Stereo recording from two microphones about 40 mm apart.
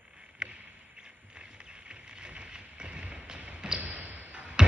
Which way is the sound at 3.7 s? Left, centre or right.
Right.